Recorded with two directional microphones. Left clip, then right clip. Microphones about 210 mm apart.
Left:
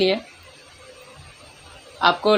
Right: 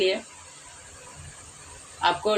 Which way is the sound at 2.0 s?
35° left (ahead or behind).